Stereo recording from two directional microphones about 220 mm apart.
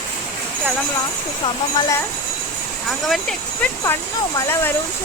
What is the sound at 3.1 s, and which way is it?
Speech, 5° left (ahead or behind).